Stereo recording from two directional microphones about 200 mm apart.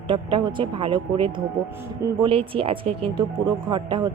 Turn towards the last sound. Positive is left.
turn(degrees=-25)  # may be behind; listen again after turning